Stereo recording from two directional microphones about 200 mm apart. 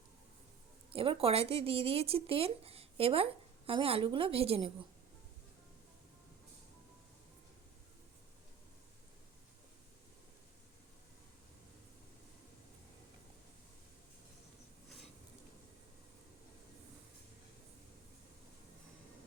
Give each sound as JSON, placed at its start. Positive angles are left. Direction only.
{"t": 0.9, "sound": "speech", "side_deg": -30}